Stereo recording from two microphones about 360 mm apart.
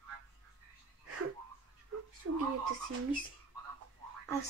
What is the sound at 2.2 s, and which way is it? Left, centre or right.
Speech, right.